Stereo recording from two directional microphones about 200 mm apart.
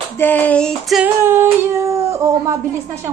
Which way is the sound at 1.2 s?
10° right (ahead or behind).